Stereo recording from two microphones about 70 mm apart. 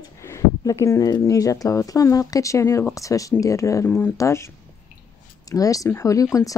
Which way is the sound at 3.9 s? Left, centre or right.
Left.